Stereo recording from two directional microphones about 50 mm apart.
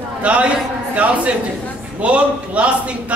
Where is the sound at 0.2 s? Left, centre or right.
Right.